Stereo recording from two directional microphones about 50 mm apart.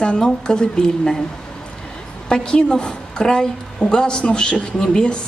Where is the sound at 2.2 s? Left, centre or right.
Centre.